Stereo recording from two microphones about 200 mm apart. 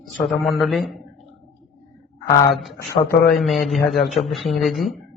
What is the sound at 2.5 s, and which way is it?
A man's voice, centre (ahead or behind).